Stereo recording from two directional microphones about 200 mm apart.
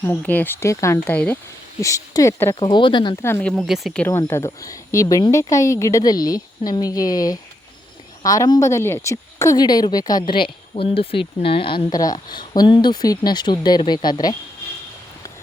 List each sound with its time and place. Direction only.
0.0 s a woman's voice: 10° left (ahead or behind)
3.2 s a woman's voice: 10° left (ahead or behind)